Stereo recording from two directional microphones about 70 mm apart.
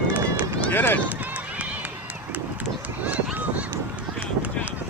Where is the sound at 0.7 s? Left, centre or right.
Left.